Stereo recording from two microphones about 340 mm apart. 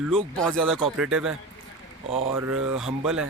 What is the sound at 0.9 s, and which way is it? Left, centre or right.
Speech, centre.